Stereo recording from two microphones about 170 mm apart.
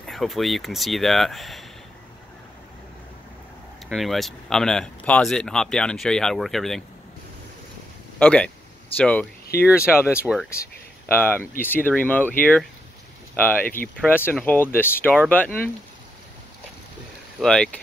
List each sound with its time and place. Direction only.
0.0 s speech: centre (ahead or behind)
3.9 s speech: centre (ahead or behind)
8.2 s speech: 10° left (ahead or behind)
9.5 s speech: 65° left (ahead or behind)
9.9 s speech: 5° left (ahead or behind)
11.1 s speech: 10° left (ahead or behind)
13.7 s speech: 10° left (ahead or behind)
17.4 s speech: 5° left (ahead or behind)